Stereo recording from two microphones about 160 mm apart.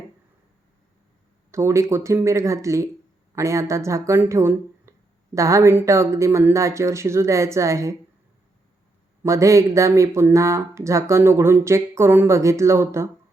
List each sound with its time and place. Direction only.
1.5 s speech: 15° right (ahead or behind)
9.2 s speech: 20° right (ahead or behind)